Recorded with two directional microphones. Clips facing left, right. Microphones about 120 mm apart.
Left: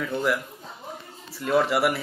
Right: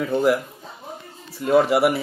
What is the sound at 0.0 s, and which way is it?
Speech, 25° right (ahead or behind).